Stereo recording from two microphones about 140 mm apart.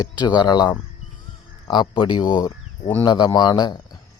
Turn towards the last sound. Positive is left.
turn(degrees=30)  # may be behind; listen again after turning